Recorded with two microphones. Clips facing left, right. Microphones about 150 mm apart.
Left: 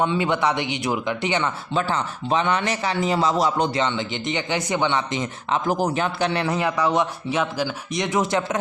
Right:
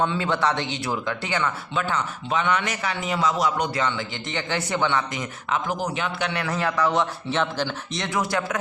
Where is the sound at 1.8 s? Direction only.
35° left (ahead or behind).